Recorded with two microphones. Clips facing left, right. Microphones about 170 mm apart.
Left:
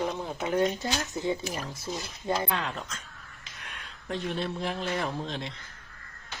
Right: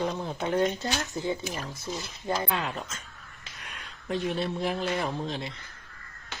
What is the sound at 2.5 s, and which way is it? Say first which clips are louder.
Speech: right 1 dB; 5° right (ahead or behind).